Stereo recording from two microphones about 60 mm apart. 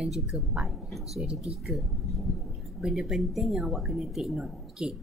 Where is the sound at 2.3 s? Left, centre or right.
Centre.